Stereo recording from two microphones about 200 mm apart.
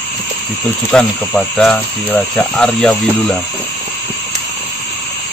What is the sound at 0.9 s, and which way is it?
A man's voice, centre (ahead or behind).